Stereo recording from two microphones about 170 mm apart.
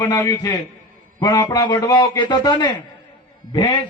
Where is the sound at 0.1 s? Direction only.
20° left (ahead or behind).